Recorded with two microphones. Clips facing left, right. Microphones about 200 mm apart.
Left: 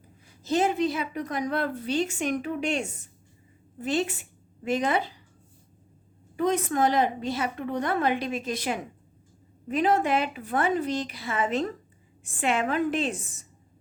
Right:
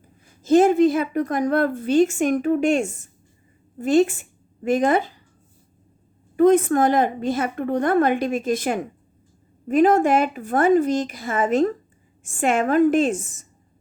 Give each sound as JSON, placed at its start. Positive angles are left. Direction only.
{"t": 0.3, "sound": "a woman's voice", "side_deg": -50}
{"t": 6.3, "sound": "a woman's voice", "side_deg": -50}